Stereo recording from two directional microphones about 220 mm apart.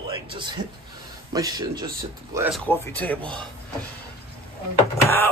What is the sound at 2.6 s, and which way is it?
Speech, 10° left (ahead or behind).